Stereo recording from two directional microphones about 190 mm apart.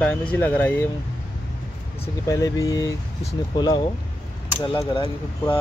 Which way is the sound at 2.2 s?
20° left (ahead or behind).